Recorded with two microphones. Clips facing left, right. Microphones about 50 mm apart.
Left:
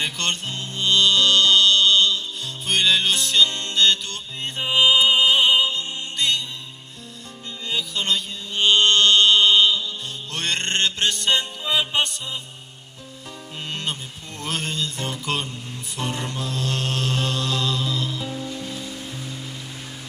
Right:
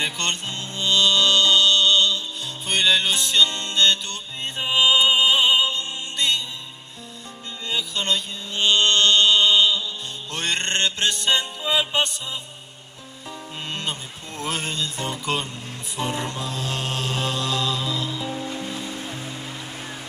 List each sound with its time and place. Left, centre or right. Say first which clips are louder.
0.0 s music: even; centre
7.7 s mantra: even; centre
10.3 s music: even; centre
13.7 s music: left 1 dB; centre
18.3 s music: right 1 dB; right